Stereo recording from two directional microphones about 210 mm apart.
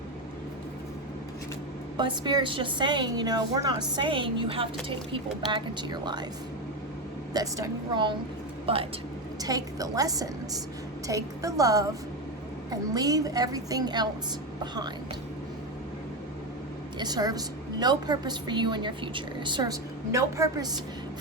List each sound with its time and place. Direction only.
2.0 s a woman's voice: 20° right (ahead or behind)
7.3 s a woman's voice: 15° right (ahead or behind)
17.0 s a woman's voice: 20° right (ahead or behind)